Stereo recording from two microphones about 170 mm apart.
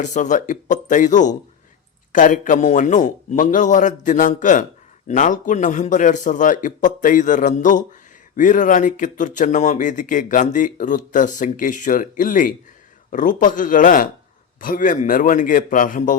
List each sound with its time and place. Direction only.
0.0 s speech: 45° left (ahead or behind)